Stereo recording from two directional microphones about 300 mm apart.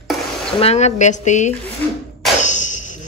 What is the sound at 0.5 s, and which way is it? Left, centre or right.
Speech, centre.